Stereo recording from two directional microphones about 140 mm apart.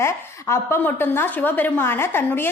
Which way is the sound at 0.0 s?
20° left (ahead or behind).